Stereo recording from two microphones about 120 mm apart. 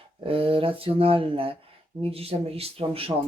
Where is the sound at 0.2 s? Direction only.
50° right (ahead or behind).